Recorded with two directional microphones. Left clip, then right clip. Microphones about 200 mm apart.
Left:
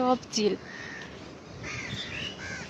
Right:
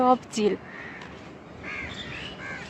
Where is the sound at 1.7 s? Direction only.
45° right (ahead or behind).